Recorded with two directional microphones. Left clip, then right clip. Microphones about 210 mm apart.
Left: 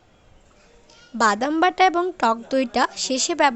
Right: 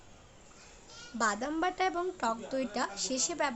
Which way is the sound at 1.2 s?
40° left (ahead or behind).